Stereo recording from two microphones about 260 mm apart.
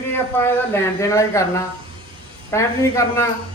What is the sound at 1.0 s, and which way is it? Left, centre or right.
Speech, centre.